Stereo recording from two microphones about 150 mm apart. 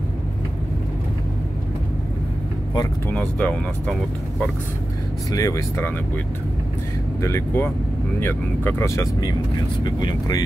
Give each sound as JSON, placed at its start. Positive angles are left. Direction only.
{"t": 3.1, "sound": "speech", "side_deg": 10}
{"t": 5.3, "sound": "speech", "side_deg": 20}